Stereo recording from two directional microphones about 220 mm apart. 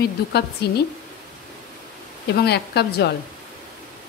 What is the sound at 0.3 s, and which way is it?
Speech, 45° left (ahead or behind).